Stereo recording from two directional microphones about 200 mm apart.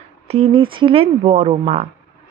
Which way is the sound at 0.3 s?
30° right (ahead or behind).